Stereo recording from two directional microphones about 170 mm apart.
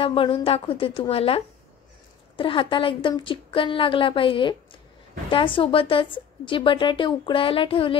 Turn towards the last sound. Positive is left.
turn(degrees=30)  # may be behind; listen again after turning